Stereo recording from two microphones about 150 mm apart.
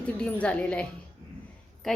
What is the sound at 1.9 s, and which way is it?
Speech, 5° left (ahead or behind).